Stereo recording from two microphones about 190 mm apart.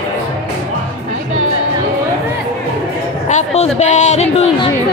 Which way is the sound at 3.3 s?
35° left (ahead or behind).